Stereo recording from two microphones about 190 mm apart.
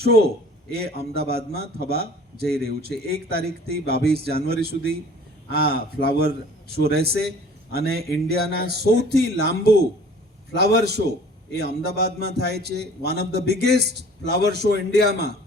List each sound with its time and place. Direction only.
0.0 s speech: 55° right (ahead or behind)